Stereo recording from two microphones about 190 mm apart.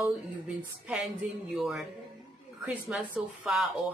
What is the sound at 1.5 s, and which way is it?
Speech, centre (ahead or behind).